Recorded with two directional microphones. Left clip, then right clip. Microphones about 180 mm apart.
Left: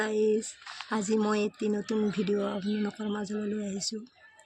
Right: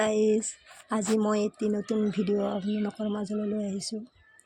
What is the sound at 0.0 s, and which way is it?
Speech, 15° right (ahead or behind).